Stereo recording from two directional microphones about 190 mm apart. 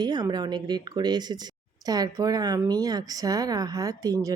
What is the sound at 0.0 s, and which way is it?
A woman's voice, 20° right (ahead or behind).